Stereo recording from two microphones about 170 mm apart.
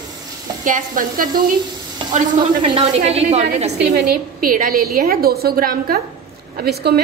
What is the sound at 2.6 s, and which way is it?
A woman's voice, 35° right (ahead or behind).